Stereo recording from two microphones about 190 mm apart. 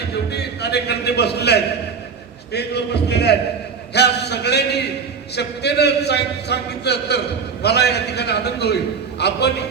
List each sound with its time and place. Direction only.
0.1 s a man's voice: 60° left (ahead or behind)